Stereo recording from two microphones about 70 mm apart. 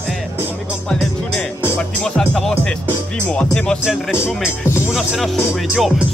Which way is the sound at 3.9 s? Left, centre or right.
Centre.